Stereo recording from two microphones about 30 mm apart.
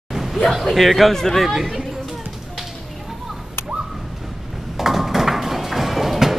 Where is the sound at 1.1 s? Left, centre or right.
Centre.